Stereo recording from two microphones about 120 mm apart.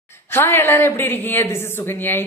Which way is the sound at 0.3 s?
20° left (ahead or behind).